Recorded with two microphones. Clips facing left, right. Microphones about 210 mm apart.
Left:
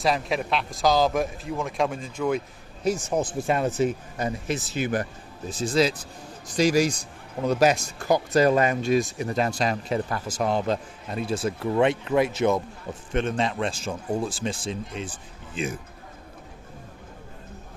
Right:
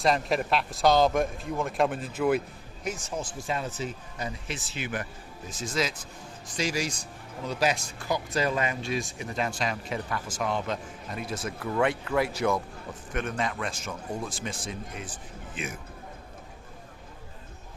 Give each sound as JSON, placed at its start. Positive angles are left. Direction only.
{"t": 0.0, "sound": "speech", "side_deg": 0}
{"t": 3.1, "sound": "a man's voice", "side_deg": 60}